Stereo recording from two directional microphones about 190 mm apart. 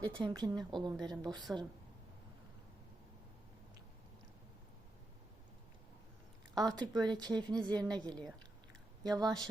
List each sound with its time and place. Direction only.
0.0 s speech: 25° right (ahead or behind)
6.7 s speech: 20° right (ahead or behind)